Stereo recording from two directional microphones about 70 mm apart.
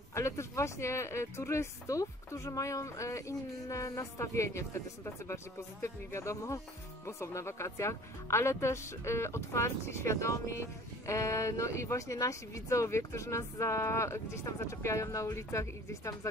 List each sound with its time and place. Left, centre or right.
0.1 s speech: left